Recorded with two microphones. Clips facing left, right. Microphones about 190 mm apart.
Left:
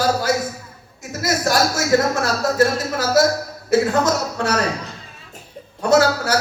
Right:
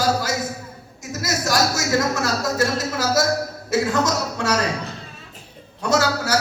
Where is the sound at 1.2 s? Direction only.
55° left (ahead or behind).